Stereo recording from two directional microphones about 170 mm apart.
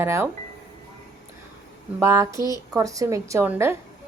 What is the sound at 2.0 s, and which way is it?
A woman's voice, 15° right (ahead or behind).